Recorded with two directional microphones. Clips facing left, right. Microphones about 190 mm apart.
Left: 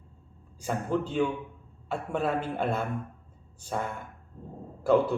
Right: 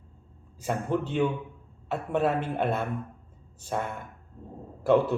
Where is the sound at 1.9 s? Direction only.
5° right (ahead or behind).